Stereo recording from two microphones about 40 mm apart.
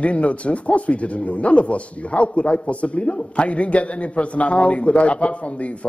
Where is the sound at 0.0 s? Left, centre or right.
Left.